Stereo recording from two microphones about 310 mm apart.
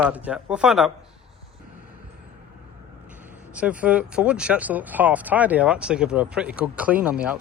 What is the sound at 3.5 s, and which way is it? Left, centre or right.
Speech, centre.